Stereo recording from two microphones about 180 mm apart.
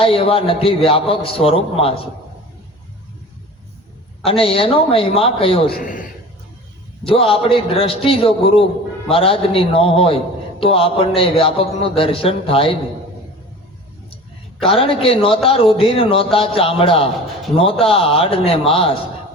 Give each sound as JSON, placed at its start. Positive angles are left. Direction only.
{"t": 0.0, "sound": "a man's voice", "side_deg": 30}
{"t": 4.3, "sound": "a man's voice", "side_deg": 30}
{"t": 5.7, "sound": "a man's voice", "side_deg": 50}
{"t": 7.0, "sound": "a man's voice", "side_deg": 30}
{"t": 14.6, "sound": "a man's voice", "side_deg": 30}